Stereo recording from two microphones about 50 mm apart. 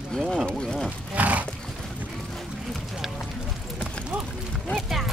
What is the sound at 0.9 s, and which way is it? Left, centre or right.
Speech, right.